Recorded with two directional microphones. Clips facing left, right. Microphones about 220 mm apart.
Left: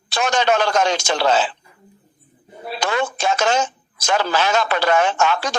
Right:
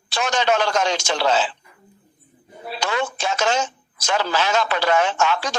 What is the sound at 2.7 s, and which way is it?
A man's voice, 50° left (ahead or behind).